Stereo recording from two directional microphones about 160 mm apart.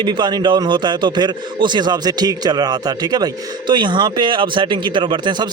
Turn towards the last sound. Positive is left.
turn(degrees=-30)  # may be behind; listen again after turning